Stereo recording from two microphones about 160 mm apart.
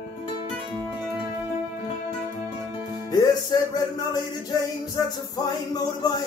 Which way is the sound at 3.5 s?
25° left (ahead or behind).